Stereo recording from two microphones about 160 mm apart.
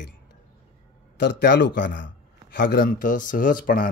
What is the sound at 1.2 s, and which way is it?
A man's voice, 90° left.